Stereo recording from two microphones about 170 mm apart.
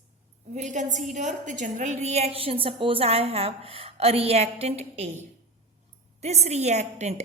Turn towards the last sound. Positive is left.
turn(degrees=-40)  # may be behind; listen again after turning